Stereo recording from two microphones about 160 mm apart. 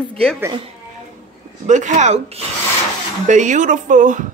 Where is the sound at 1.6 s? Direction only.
50° right (ahead or behind).